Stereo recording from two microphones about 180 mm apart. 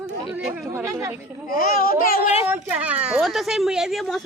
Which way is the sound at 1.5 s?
50° left (ahead or behind).